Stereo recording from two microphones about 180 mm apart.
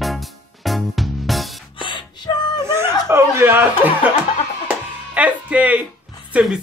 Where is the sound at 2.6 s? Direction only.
15° right (ahead or behind).